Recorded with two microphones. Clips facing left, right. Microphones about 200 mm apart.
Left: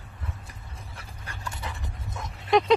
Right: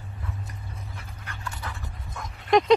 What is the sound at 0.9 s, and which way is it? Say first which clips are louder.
Dog: right 1 dB; 30° left (ahead or behind).